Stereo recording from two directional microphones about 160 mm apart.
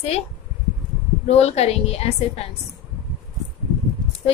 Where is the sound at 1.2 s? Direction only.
40° left (ahead or behind).